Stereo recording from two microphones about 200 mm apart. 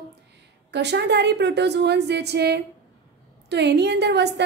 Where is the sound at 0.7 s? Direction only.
60° right (ahead or behind).